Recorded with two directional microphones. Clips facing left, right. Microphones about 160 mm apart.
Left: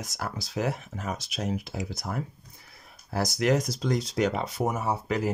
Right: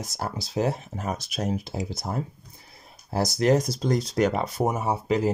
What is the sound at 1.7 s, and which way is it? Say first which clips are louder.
Speech: right 3 dB; 30° right (ahead or behind).